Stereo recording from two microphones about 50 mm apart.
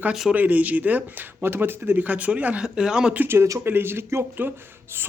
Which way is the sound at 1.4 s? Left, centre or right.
Right.